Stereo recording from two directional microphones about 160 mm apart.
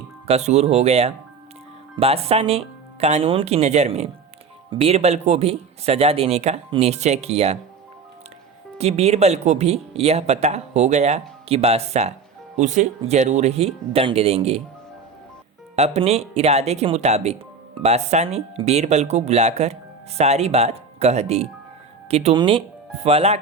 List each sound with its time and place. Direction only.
0.3 s speech: 40° right (ahead or behind)
8.8 s speech: 40° right (ahead or behind)
15.7 s speech: 40° right (ahead or behind)